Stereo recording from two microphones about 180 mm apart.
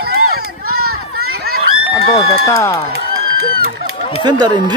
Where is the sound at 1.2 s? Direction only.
60° right (ahead or behind).